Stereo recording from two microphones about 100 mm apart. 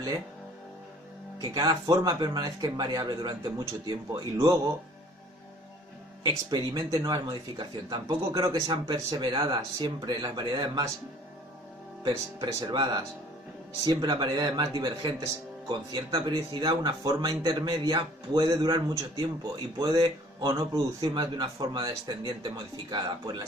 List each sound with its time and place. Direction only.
1.4 s a man's voice: 40° right (ahead or behind)
6.2 s a man's voice: 40° right (ahead or behind)
8.7 s speech: 50° right (ahead or behind)
12.5 s a man's voice: 40° right (ahead or behind)